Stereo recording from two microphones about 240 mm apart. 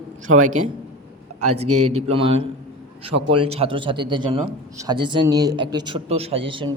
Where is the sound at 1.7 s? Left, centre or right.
Right.